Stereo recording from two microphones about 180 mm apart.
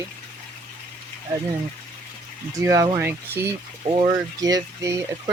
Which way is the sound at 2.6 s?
20° right (ahead or behind).